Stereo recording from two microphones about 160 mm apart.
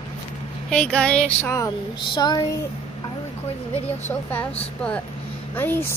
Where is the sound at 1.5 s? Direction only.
25° left (ahead or behind).